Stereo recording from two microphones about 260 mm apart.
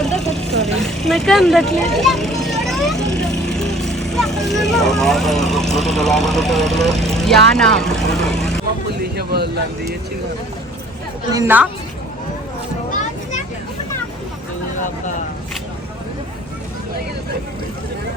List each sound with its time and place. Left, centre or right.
0.3 s vehicle: centre
0.8 s speech: centre
8.1 s vehicle: centre
9.0 s speech: right
11.3 s a woman's voice: centre